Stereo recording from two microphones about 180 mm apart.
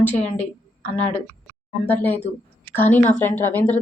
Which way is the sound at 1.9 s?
10° left (ahead or behind).